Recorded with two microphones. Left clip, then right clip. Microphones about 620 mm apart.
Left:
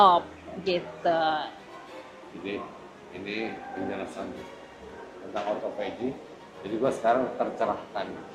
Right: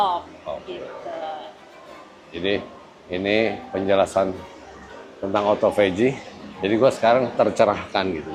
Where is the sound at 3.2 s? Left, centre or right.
Right.